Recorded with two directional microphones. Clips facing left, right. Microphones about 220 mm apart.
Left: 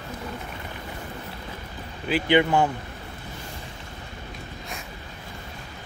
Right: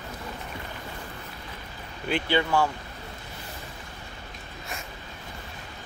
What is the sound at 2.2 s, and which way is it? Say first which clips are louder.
Speech: left 5 dB; 20° left (ahead or behind).